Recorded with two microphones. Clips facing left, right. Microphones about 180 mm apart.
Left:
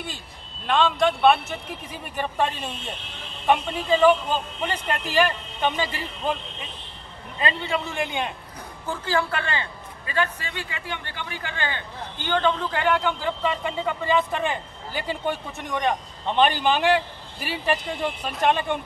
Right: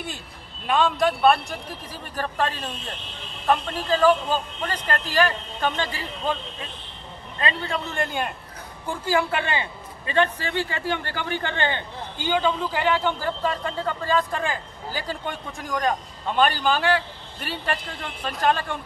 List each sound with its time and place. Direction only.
0.7 s a man's voice: 5° right (ahead or behind)
8.8 s a man's voice: 15° right (ahead or behind)
12.2 s a man's voice: 10° right (ahead or behind)
13.4 s a man's voice: 5° left (ahead or behind)
16.3 s a man's voice: 20° left (ahead or behind)
17.4 s a man's voice: 5° left (ahead or behind)